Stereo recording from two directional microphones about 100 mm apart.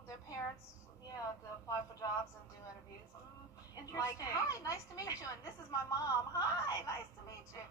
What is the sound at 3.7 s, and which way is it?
Speech, 35° left (ahead or behind).